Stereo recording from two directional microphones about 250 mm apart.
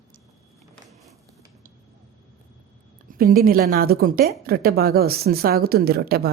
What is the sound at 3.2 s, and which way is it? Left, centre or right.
Speech, right.